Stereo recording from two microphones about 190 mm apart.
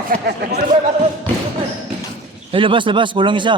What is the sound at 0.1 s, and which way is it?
Speech, 55° right (ahead or behind).